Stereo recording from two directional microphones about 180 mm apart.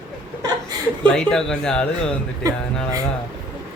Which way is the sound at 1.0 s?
5° left (ahead or behind).